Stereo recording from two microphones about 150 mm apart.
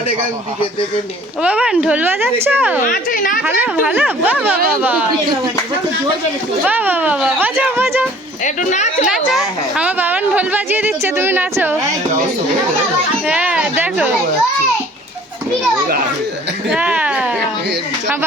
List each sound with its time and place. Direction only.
1.4 s a woman's voice: 5° right (ahead or behind)
2.8 s a woman's voice: 65° left (ahead or behind)
3.4 s a woman's voice: 10° right (ahead or behind)
6.7 s a woman's voice: 10° right (ahead or behind)
8.4 s speech: 50° left (ahead or behind)
9.0 s a woman's voice: 5° right (ahead or behind)
13.2 s a woman's voice: 5° right (ahead or behind)
16.6 s a sound: 10° right (ahead or behind)